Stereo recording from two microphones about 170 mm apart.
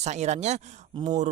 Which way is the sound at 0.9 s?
30° right (ahead or behind).